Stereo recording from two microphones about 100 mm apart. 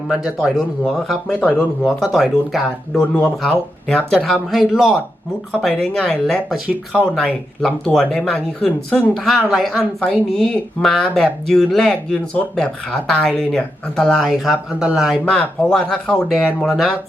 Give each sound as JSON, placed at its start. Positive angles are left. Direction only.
{"t": 0.3, "sound": "speech", "side_deg": 0}
{"t": 1.4, "sound": "speech", "side_deg": 15}
{"t": 1.8, "sound": "speech", "side_deg": 0}
{"t": 2.9, "sound": "speech", "side_deg": 15}
{"t": 4.5, "sound": "speech", "side_deg": -5}
{"t": 5.5, "sound": "speech", "side_deg": 10}
{"t": 15.2, "sound": "speech", "side_deg": 5}